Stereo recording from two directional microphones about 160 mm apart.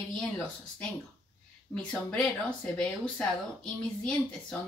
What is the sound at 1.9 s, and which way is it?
Speech, 5° left (ahead or behind).